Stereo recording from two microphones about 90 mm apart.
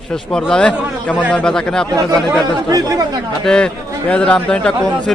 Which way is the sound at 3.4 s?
10° left (ahead or behind).